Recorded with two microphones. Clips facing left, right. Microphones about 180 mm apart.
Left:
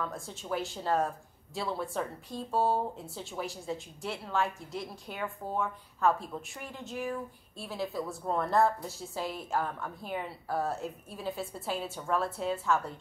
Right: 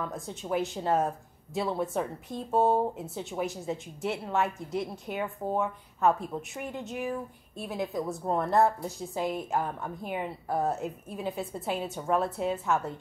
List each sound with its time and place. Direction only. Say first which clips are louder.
0.0 s speech: right 2 dB; 20° right (ahead or behind)
11.6 s a woman's voice: right 3 dB; centre (ahead or behind)
11.9 s speech: right 5 dB; 20° right (ahead or behind)